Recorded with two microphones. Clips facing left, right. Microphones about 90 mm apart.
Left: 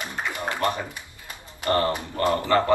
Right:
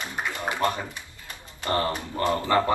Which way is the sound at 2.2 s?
20° right (ahead or behind).